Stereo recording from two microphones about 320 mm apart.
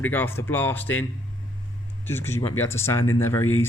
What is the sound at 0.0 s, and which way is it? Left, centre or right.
Speech, centre.